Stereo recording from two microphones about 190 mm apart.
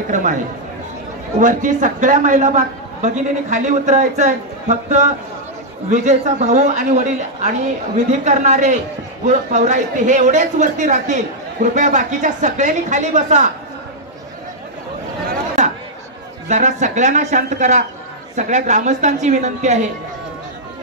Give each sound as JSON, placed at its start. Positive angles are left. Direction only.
{"t": 0.1, "sound": "a man's voice", "side_deg": -40}
{"t": 1.4, "sound": "a man's voice", "side_deg": -40}
{"t": 15.6, "sound": "chatter", "side_deg": -40}
{"t": 16.4, "sound": "a man's voice", "side_deg": -40}